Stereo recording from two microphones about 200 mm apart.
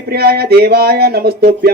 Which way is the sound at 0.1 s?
50° right (ahead or behind).